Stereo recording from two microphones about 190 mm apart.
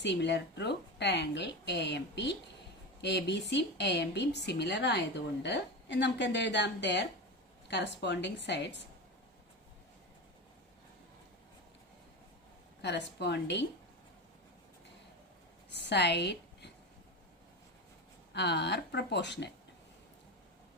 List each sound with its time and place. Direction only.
0.0 s a woman's voice: 65° left (ahead or behind)
12.8 s a woman's voice: 65° left (ahead or behind)
15.7 s a woman's voice: 65° left (ahead or behind)
18.3 s a woman's voice: 65° left (ahead or behind)